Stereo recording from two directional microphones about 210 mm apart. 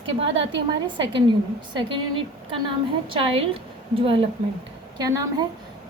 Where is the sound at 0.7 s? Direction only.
25° right (ahead or behind).